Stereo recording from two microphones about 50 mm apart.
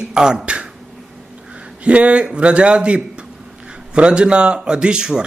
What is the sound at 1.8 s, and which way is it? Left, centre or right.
A man's voice, right.